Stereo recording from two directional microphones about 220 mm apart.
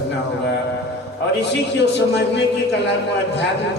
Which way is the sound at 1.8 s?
50° left (ahead or behind).